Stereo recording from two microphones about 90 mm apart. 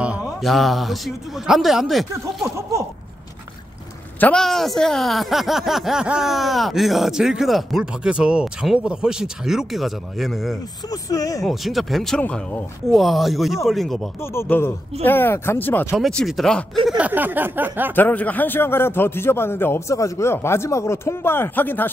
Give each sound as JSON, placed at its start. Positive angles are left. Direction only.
{"t": 0.4, "sound": "speech", "side_deg": 0}
{"t": 4.4, "sound": "speech", "side_deg": 5}
{"t": 10.9, "sound": "speech", "side_deg": 40}
{"t": 11.4, "sound": "speech", "side_deg": 0}
{"t": 12.2, "sound": "a man's voice", "side_deg": 20}
{"t": 12.9, "sound": "speech", "side_deg": 0}
{"t": 14.2, "sound": "a man's voice", "side_deg": 25}
{"t": 16.3, "sound": "speech", "side_deg": 0}
{"t": 16.9, "sound": "a sound", "side_deg": -15}
{"t": 17.9, "sound": "a man's voice", "side_deg": 20}